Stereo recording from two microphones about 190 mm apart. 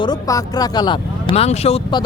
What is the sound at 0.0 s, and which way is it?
Speech, 20° left (ahead or behind).